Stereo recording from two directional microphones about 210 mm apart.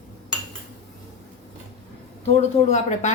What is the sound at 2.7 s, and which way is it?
Speech, 30° left (ahead or behind).